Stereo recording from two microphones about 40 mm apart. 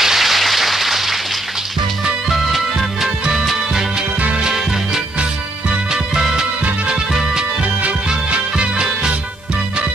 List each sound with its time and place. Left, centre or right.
0.0 s a sound: centre
2.2 s music: centre
4.4 s music: centre
8.3 s music: right